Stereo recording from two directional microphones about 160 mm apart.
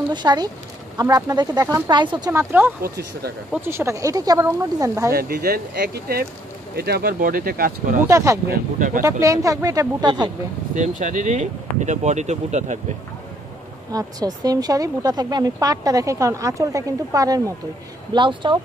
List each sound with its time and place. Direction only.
0.1 s speech: 25° right (ahead or behind)
2.3 s speech: 15° right (ahead or behind)
5.1 s speech: 70° right (ahead or behind)
8.1 s speech: 15° right (ahead or behind)
8.5 s speech: 55° right (ahead or behind)
9.0 s speech: 20° right (ahead or behind)
10.7 s speech: 50° right (ahead or behind)
13.9 s speech: 25° right (ahead or behind)